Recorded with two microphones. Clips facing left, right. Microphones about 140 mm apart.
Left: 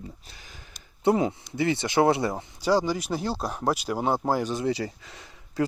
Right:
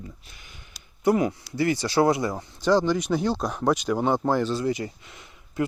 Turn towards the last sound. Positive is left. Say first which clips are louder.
# left 1 dB
turn(degrees=30)  # may be behind; listen again after turning